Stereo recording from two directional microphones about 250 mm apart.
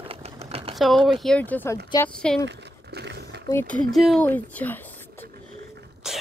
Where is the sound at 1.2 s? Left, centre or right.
Centre.